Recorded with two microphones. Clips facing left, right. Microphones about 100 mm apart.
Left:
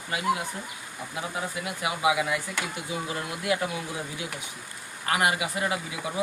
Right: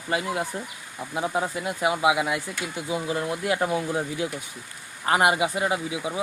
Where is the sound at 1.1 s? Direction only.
35° right (ahead or behind).